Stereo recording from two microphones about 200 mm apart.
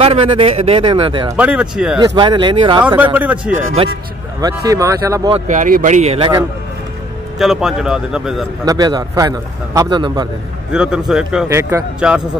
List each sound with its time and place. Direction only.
0.0 s a man's voice: 30° right (ahead or behind)
1.3 s speech: 5° right (ahead or behind)
2.0 s a man's voice: 25° right (ahead or behind)
3.0 s speech: 10° right (ahead or behind)
3.5 s a man's voice: 40° right (ahead or behind)
4.4 s speech: 20° right (ahead or behind)
5.5 s a man's voice: 40° right (ahead or behind)
7.3 s speech: centre (ahead or behind)
8.6 s a man's voice: 20° right (ahead or behind)
10.7 s speech: 5° right (ahead or behind)
11.4 s speech: 15° right (ahead or behind)